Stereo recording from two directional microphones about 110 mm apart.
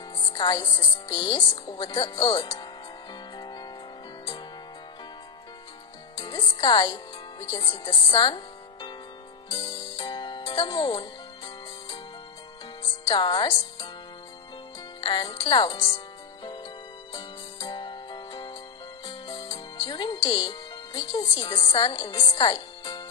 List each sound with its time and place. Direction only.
0.2 s a woman's voice: 45° left (ahead or behind)
3.3 s music: 40° left (ahead or behind)
6.1 s speech: 45° left (ahead or behind)
9.9 s music: 45° left (ahead or behind)
13.1 s a woman's voice: 50° left (ahead or behind)
15.0 s a woman's voice: 45° left (ahead or behind)
17.1 s music: 45° left (ahead or behind)
19.9 s speech: 45° left (ahead or behind)
21.9 s speech: 40° left (ahead or behind)
22.4 s music: 45° left (ahead or behind)